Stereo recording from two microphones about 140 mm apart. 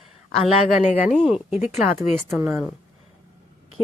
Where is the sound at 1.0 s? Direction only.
5° right (ahead or behind).